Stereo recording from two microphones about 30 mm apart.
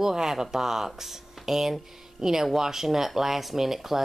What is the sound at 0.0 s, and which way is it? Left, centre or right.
Speech, centre.